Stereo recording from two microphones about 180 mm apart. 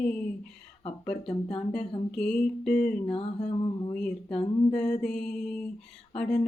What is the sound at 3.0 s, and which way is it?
Mantra, 30° left (ahead or behind).